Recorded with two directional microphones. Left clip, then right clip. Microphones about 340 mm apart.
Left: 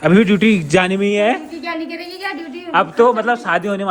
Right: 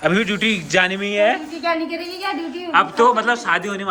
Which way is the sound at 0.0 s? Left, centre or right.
Centre.